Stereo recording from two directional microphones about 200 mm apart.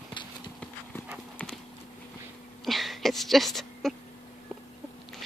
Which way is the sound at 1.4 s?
5° left (ahead or behind).